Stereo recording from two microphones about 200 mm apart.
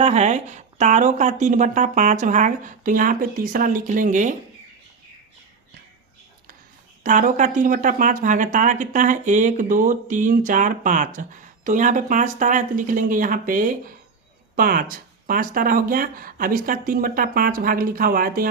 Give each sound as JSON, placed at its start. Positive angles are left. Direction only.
{"t": 0.0, "sound": "speech", "side_deg": -35}
{"t": 7.0, "sound": "speech", "side_deg": -40}